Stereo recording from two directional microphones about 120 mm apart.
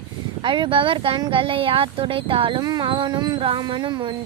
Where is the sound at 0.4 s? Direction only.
40° right (ahead or behind).